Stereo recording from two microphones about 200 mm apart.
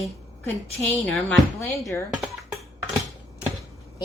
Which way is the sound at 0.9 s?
10° left (ahead or behind).